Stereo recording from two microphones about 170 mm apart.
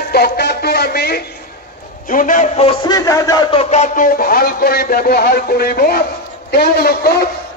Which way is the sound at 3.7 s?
50° left (ahead or behind).